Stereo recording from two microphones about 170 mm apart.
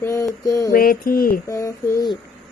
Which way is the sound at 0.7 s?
55° left (ahead or behind).